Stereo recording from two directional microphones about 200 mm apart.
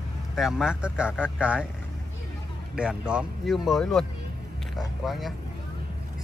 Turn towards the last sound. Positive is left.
turn(degrees=0)  # may be behind; listen again after turning